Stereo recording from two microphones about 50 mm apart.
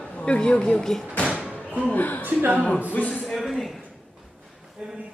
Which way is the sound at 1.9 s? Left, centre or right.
Left.